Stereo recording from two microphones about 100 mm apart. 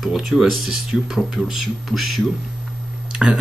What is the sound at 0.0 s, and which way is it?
Speech, centre (ahead or behind).